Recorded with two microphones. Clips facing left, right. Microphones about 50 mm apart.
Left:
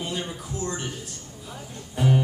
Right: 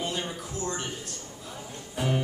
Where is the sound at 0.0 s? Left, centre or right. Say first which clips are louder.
Left 1 dB; centre.